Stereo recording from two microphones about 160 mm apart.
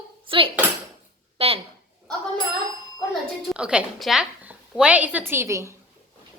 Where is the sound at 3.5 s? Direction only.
5° right (ahead or behind).